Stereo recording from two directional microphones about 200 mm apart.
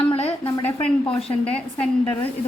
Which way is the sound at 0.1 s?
30° left (ahead or behind).